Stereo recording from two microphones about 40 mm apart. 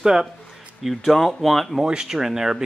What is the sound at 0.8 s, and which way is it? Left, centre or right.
Speech, centre.